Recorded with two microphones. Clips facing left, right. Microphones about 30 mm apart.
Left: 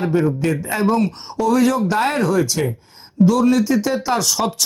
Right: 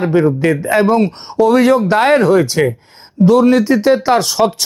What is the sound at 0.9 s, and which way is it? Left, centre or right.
Speech, right.